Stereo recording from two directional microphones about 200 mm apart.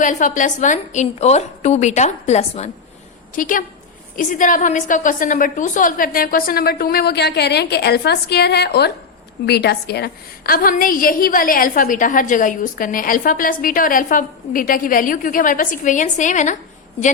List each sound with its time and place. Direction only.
0.0 s a woman's voice: 40° left (ahead or behind)